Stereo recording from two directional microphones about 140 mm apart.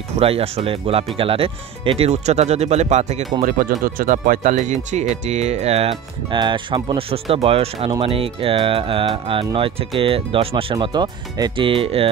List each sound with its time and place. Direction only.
0.2 s speech: 45° right (ahead or behind)
3.4 s speech: 90° right; by 5.9 s 50° right (ahead or behind)
6.3 s speech: 35° right (ahead or behind)